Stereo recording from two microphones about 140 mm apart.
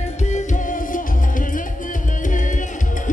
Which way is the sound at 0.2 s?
60° left (ahead or behind).